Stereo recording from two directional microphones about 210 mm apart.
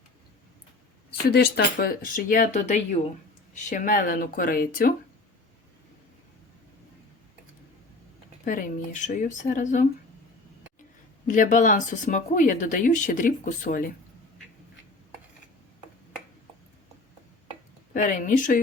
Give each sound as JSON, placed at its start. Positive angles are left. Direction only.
{"t": 1.2, "sound": "speech", "side_deg": 50}
{"t": 8.4, "sound": "speech", "side_deg": 40}
{"t": 11.3, "sound": "speech", "side_deg": 40}
{"t": 17.9, "sound": "speech", "side_deg": 40}